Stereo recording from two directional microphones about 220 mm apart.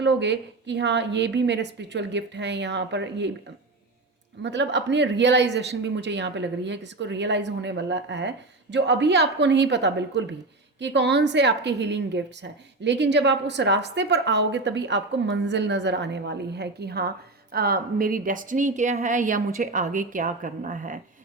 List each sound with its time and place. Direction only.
0.0 s a woman's voice: 55° right (ahead or behind)
4.4 s a woman's voice: 55° right (ahead or behind); by 21.0 s 35° right (ahead or behind)